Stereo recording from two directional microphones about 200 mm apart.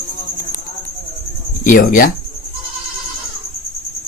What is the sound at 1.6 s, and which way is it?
Speech, 45° left (ahead or behind).